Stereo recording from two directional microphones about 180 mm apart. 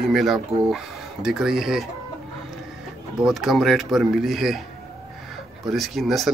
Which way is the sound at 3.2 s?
Centre (ahead or behind).